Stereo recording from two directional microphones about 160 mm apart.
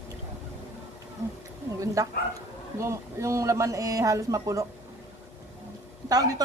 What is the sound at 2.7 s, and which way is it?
Speech, 20° right (ahead or behind).